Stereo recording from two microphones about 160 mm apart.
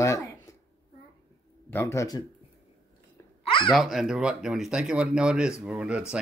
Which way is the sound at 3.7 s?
Centre (ahead or behind).